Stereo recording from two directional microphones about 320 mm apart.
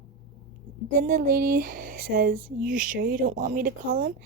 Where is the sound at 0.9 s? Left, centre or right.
Right.